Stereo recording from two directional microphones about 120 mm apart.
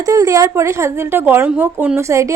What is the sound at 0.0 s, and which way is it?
A woman's voice, 30° right (ahead or behind).